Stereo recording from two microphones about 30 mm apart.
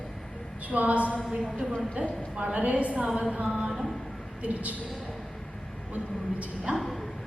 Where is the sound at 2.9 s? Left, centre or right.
Right.